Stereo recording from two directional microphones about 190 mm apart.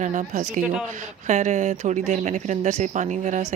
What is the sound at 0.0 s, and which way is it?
Speech, 40° right (ahead or behind).